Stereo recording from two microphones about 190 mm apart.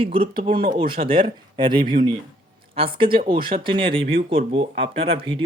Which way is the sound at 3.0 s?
25° right (ahead or behind).